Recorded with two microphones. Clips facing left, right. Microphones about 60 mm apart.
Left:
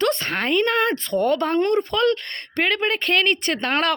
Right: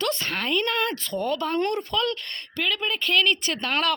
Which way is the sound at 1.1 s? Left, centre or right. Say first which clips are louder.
Left 6 dB; left.